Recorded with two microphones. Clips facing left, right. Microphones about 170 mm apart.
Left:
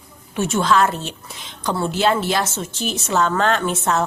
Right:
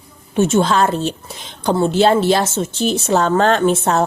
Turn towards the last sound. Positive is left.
turn(degrees=-35)  # may be behind; listen again after turning